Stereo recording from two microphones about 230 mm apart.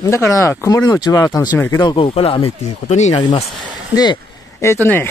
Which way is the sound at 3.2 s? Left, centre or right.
Centre.